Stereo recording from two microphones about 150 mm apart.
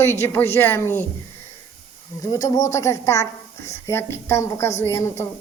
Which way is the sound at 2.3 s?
25° left (ahead or behind).